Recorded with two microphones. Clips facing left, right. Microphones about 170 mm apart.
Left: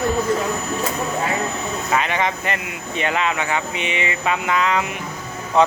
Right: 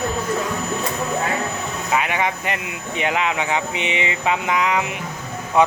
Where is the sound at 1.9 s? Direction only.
10° right (ahead or behind).